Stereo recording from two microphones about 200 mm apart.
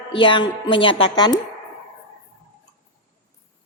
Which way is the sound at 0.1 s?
25° left (ahead or behind).